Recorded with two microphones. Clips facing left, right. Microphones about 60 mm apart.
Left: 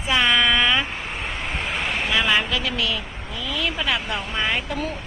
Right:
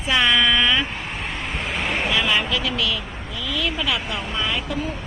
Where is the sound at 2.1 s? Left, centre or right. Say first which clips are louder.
Left 2 dB; left.